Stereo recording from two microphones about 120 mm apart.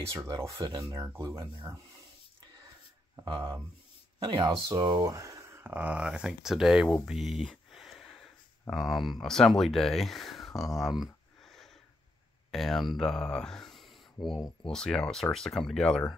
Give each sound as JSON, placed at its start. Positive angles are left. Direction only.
{"t": 0.1, "sound": "speech", "side_deg": -25}
{"t": 3.3, "sound": "speech", "side_deg": -35}
{"t": 5.1, "sound": "speech", "side_deg": -25}